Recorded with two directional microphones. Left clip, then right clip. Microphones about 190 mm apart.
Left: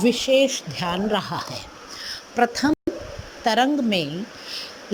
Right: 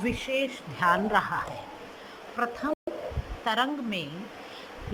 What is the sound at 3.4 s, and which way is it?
Speech, 30° left (ahead or behind).